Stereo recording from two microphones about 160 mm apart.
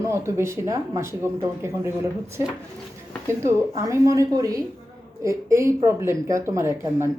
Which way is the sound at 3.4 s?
15° right (ahead or behind).